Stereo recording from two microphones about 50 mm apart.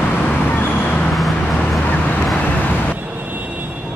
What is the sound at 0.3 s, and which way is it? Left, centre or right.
Vehicle, left.